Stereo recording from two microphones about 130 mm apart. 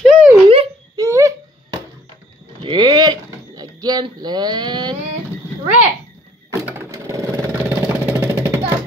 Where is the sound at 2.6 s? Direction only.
35° right (ahead or behind).